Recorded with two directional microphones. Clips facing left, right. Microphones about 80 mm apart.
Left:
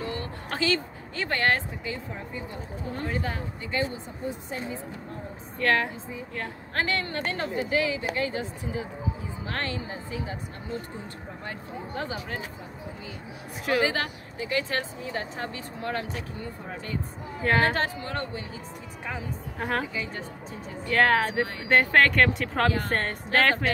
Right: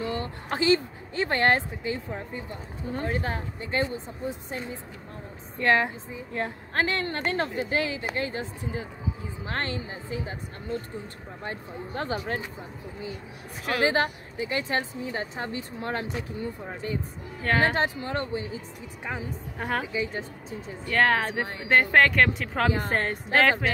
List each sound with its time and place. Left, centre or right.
0.1 s speech: right
3.0 s speech: right
5.6 s speech: centre
11.9 s speech: right
13.8 s speech: right
17.6 s speech: centre
19.6 s speech: centre
19.9 s a woman's voice: centre
20.8 s speech: centre